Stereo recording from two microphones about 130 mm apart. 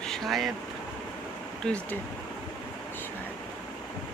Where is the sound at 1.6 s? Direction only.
10° left (ahead or behind).